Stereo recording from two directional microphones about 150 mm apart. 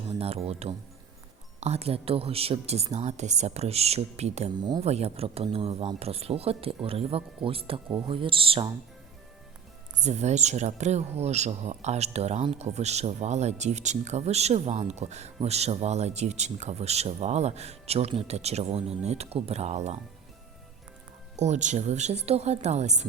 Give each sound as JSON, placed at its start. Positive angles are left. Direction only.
{"t": 0.2, "sound": "speech", "side_deg": -40}
{"t": 10.0, "sound": "speech", "side_deg": -50}
{"t": 21.3, "sound": "speech", "side_deg": -50}